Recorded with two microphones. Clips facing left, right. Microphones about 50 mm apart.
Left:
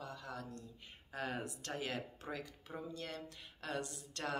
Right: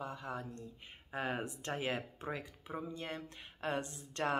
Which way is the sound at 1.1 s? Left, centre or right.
Right.